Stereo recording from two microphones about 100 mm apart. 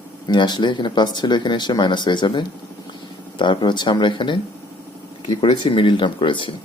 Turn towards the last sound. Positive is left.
turn(degrees=55)  # may be behind; listen again after turning